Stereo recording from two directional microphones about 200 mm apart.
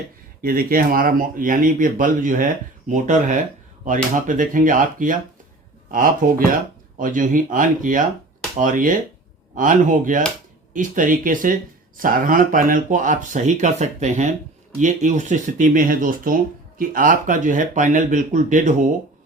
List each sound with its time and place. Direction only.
0.4 s speech: 45° right (ahead or behind)